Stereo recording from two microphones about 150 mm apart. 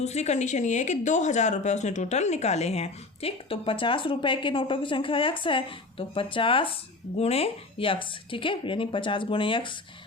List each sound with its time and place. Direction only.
0.0 s speech: 50° left (ahead or behind)